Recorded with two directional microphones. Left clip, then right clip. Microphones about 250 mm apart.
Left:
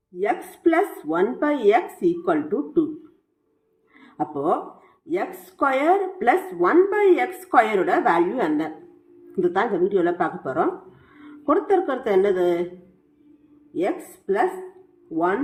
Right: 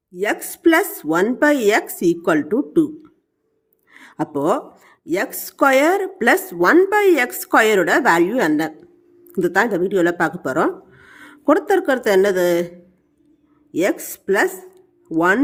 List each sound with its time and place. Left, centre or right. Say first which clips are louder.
0.2 s speech: right 3 dB; right
3.9 s speech: right 3 dB; right
13.7 s speech: right 5 dB; right